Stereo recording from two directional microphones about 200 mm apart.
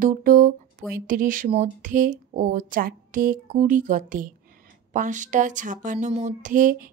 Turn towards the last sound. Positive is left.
turn(degrees=-40)  # may be behind; listen again after turning